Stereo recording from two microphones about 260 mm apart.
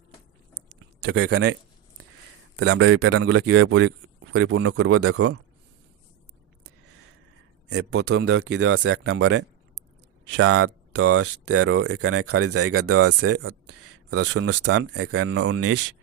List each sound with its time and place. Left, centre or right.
1.0 s a man's voice: right
2.6 s a man's voice: right
7.7 s a man's voice: right